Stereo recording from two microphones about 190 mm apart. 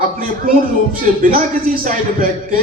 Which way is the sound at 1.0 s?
45° right (ahead or behind).